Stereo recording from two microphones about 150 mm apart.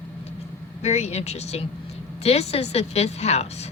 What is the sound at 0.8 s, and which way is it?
A woman's voice, 45° left (ahead or behind).